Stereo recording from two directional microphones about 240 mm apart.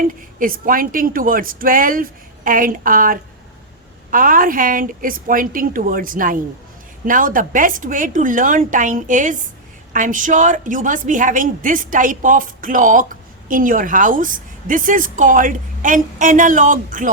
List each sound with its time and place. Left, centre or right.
0.3 s a woman's voice: right